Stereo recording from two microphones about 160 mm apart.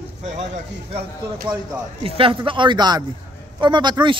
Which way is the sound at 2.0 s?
35° right (ahead or behind).